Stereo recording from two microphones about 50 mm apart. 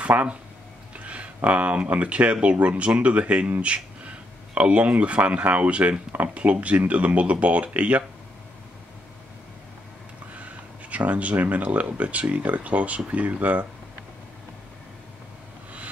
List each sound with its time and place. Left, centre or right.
0.0 s speech: right
10.9 s speech: right